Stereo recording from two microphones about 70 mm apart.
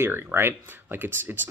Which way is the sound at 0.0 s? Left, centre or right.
Right.